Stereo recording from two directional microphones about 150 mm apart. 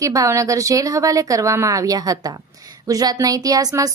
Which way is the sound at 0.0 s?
20° right (ahead or behind).